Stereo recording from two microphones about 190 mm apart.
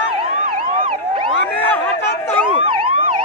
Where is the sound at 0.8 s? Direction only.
25° right (ahead or behind).